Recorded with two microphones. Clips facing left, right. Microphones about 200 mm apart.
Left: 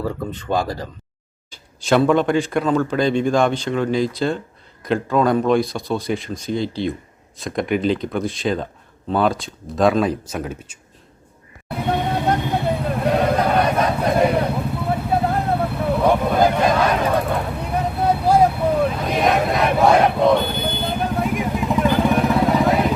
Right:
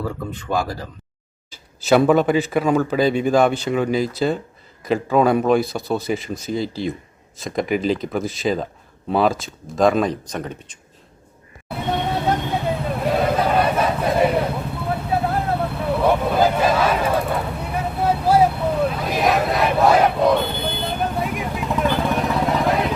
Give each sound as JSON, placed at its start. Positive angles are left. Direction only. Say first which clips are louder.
{"t": 1.5, "sound": "speech", "louder": "right 2 dB", "side_deg": -5}
{"t": 11.8, "sound": "vehicle", "louder": "left 1 dB", "side_deg": 5}